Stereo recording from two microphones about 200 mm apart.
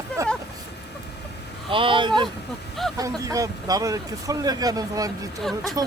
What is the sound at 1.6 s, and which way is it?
Speech, 25° right (ahead or behind).